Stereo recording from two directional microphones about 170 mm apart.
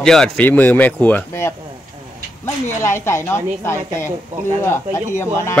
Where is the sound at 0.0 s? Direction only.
5° left (ahead or behind).